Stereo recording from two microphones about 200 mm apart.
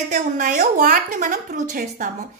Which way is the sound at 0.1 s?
40° right (ahead or behind).